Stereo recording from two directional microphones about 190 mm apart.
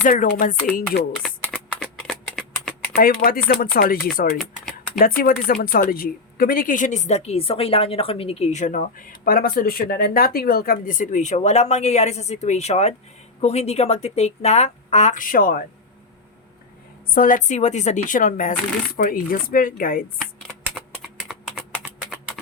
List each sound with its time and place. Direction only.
0.0 s speech: 45° left (ahead or behind)
1.1 s shuffling cards: centre (ahead or behind)
2.9 s speech: 50° left (ahead or behind)
5.2 s a woman's voice: 50° left (ahead or behind)
17.1 s a woman's voice: 45° left (ahead or behind)
20.7 s typing: 5° right (ahead or behind)